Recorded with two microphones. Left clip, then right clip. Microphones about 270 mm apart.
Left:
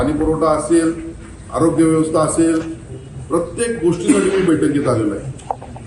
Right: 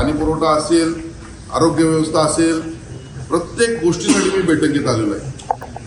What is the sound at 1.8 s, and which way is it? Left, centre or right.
Speech, centre.